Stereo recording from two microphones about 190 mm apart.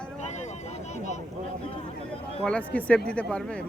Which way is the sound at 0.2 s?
40° left (ahead or behind).